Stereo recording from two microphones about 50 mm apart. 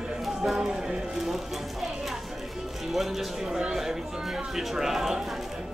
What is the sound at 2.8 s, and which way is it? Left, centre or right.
Speech, centre.